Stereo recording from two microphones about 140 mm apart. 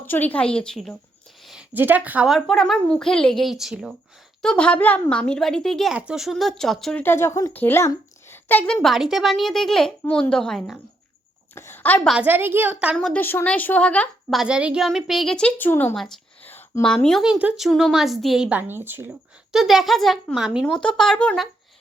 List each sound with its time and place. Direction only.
0.0 s a woman's voice: 15° left (ahead or behind)
1.7 s a woman's voice: 15° right (ahead or behind)
2.3 s speech: 5° left (ahead or behind)
4.4 s speech: 10° left (ahead or behind)
7.0 s speech: 15° left (ahead or behind)
11.5 s a woman's voice: 15° left (ahead or behind)
12.0 s a woman's voice: 10° right (ahead or behind)
13.0 s a woman's voice: 10° left (ahead or behind)
14.3 s speech: 5° right (ahead or behind); by 16.0 s 15° left (ahead or behind)
16.0 s a sound: 5° left (ahead or behind)
16.5 s a woman's voice: 15° left (ahead or behind); by 19.1 s 15° right (ahead or behind)
19.5 s speech: centre (ahead or behind)